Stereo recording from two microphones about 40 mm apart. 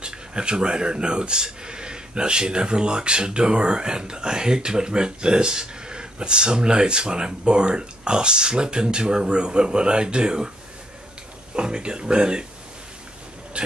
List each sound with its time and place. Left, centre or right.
0.0 s speech: right
11.5 s speech: right